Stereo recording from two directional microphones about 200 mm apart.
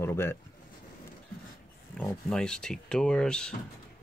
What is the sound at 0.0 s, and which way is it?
Speech, 10° left (ahead or behind).